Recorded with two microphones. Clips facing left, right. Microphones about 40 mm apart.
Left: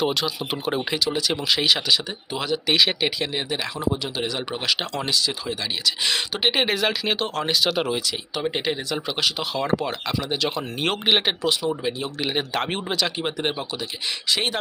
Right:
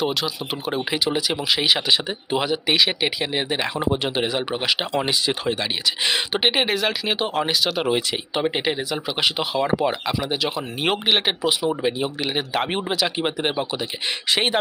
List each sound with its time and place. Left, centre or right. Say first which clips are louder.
0.0 s speech: even; centre
0.9 s speech: right 5 dB; right
1.3 s speech: left 1 dB; centre
2.7 s speech: left 1 dB; centre
3.5 s speech: right 3 dB; right
6.6 s speech: even; centre
7.2 s speech: right 3 dB; centre
7.6 s speech: left 1 dB; centre
7.9 s speech: right 4 dB; right
12.2 s speech: left 1 dB; centre
14.3 s speech: right 4 dB; right